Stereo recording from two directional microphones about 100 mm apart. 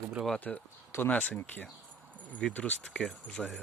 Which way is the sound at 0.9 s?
20° left (ahead or behind).